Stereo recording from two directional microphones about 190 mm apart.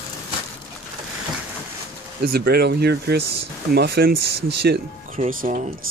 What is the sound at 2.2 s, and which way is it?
Speech, 55° right (ahead or behind).